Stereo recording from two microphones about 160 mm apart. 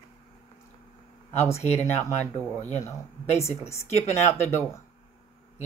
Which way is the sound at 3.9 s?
45° left (ahead or behind).